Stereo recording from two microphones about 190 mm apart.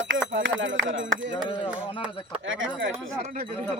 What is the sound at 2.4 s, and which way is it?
Speech, 90° right.